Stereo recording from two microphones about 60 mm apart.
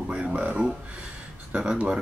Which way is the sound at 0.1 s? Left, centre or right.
Centre.